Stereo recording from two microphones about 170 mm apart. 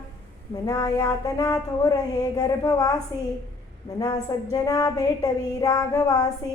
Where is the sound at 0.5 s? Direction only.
20° left (ahead or behind).